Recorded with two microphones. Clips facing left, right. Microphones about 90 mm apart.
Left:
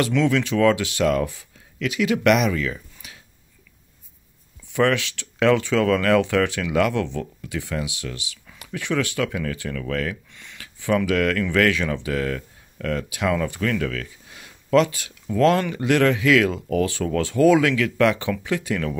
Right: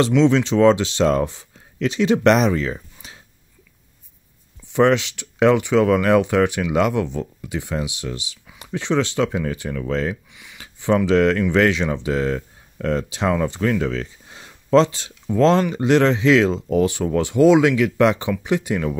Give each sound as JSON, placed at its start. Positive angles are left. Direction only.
{"t": 0.0, "sound": "speech", "side_deg": -25}
{"t": 4.7, "sound": "speech", "side_deg": -20}
{"t": 10.3, "sound": "speech", "side_deg": -10}
{"t": 10.6, "sound": "speech", "side_deg": -20}